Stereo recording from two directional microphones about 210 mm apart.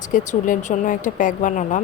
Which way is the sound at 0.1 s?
40° left (ahead or behind).